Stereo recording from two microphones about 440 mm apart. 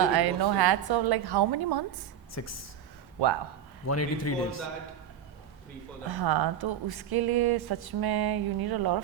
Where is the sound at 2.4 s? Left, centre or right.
Left.